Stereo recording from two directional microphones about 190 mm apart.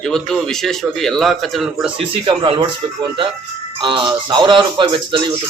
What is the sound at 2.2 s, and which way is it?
Speech, 25° right (ahead or behind).